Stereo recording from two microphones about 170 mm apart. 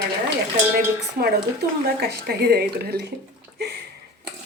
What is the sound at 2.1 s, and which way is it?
Speech, 65° right (ahead or behind).